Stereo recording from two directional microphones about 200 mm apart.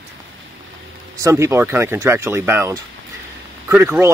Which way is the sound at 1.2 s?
15° right (ahead or behind).